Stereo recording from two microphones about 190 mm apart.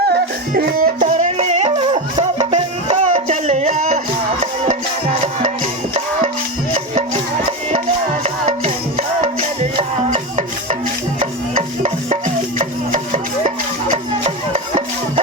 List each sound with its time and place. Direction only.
0.1 s music: 50° right (ahead or behind)
8.2 s music: 35° right (ahead or behind)
12.5 s a sound: 40° right (ahead or behind)